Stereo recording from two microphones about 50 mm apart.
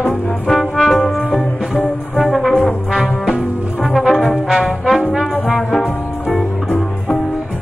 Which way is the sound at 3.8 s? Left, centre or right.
Centre.